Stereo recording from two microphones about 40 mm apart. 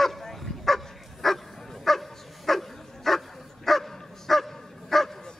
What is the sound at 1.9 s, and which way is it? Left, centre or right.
Dog, centre.